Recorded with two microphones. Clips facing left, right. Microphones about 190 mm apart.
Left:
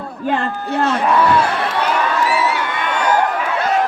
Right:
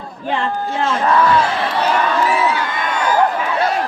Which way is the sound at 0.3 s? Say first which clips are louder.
Left 1 dB; 45° left (ahead or behind).